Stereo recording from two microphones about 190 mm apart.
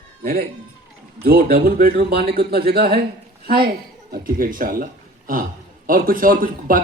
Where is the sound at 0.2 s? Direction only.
50° right (ahead or behind).